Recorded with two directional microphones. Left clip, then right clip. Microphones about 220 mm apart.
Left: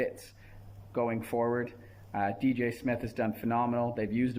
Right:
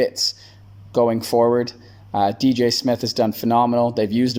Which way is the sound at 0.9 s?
35° right (ahead or behind).